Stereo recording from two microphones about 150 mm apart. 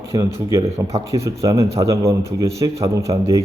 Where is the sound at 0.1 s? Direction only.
15° right (ahead or behind).